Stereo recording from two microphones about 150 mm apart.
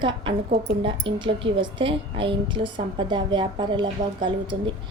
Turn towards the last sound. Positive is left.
turn(degrees=-30)  # may be behind; listen again after turning